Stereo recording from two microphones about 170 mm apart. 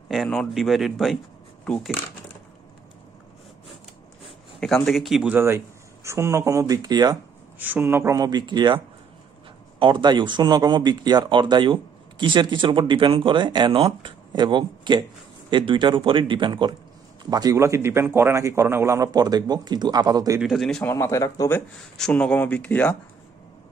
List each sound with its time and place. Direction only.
0.1 s speech: centre (ahead or behind)
4.6 s speech: 5° left (ahead or behind); by 7.2 s 25° right (ahead or behind)
7.5 s speech: 10° right (ahead or behind)
20.3 s speech: centre (ahead or behind)
20.8 s speech: 15° left (ahead or behind)